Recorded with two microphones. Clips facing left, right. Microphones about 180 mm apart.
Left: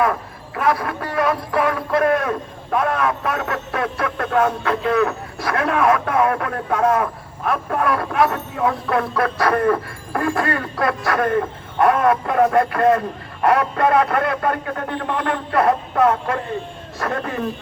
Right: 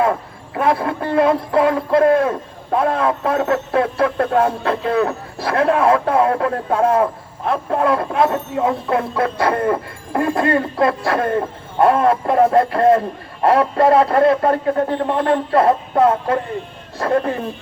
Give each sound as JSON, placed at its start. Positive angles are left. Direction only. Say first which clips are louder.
{"t": 0.0, "sound": "speech", "louder": "right 2 dB", "side_deg": -25}